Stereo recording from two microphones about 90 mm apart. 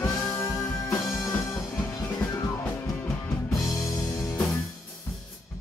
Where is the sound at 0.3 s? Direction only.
30° left (ahead or behind).